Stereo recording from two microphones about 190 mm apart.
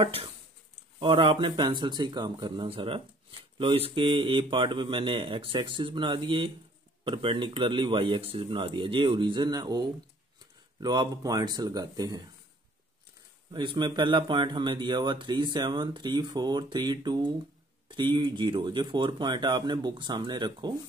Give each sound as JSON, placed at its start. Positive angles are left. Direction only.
{"t": 0.0, "sound": "speech", "side_deg": -30}
{"t": 13.5, "sound": "speech", "side_deg": -25}